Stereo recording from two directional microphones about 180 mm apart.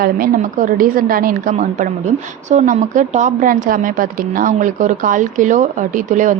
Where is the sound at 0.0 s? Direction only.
50° right (ahead or behind).